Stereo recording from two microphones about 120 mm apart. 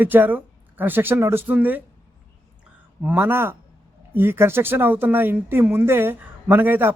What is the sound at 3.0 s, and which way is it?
Speech, 15° right (ahead or behind).